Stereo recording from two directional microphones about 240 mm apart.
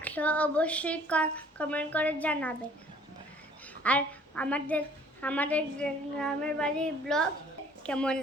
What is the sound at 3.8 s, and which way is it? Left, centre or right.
A woman's voice, centre.